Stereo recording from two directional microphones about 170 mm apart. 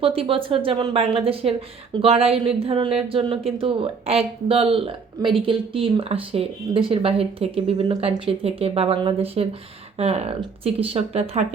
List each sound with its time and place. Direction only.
0.2 s speech: 30° right (ahead or behind)